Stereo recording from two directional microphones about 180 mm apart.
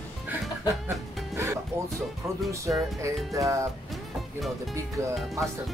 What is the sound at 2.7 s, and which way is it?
Speech, 10° right (ahead or behind).